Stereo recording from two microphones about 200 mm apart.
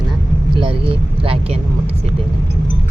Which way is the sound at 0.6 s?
25° right (ahead or behind).